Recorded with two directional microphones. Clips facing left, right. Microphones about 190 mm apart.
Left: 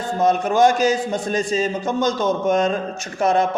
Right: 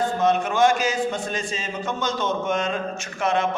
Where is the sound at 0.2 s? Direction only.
40° left (ahead or behind).